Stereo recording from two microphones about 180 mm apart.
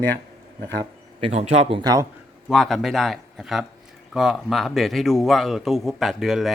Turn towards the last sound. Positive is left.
turn(degrees=0)  # may be behind; listen again after turning